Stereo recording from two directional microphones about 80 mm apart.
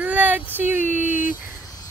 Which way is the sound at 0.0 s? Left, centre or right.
Centre.